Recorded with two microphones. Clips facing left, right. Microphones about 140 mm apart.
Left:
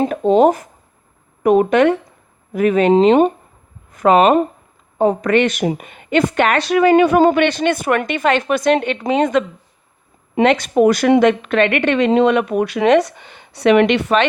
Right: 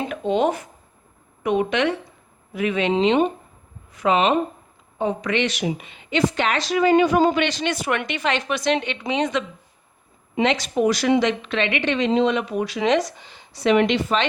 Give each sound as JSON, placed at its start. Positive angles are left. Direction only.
{"t": 0.0, "sound": "a woman's voice", "side_deg": 40}